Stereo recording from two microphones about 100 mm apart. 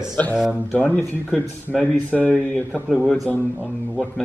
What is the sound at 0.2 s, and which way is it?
Speech, 15° left (ahead or behind).